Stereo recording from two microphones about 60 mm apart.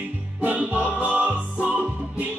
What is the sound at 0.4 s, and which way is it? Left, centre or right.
Music, right.